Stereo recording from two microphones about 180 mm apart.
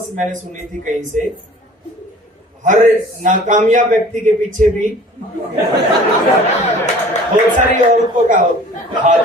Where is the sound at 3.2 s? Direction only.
45° right (ahead or behind).